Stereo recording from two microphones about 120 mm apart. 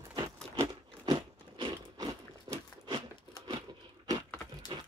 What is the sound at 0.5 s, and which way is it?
Biting, 35° right (ahead or behind).